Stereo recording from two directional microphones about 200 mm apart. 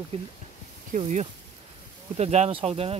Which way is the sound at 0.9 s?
35° right (ahead or behind).